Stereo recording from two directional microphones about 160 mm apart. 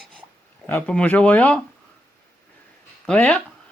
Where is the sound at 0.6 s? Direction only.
10° left (ahead or behind).